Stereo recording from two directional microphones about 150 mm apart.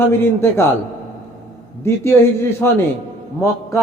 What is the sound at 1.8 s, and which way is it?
Speech, 15° left (ahead or behind).